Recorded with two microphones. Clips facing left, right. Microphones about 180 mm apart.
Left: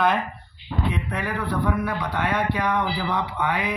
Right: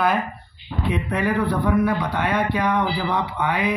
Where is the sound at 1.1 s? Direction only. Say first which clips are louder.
Right 5 dB; 15° right (ahead or behind).